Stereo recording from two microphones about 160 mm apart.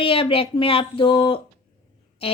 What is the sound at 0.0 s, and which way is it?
Speech, 35° left (ahead or behind).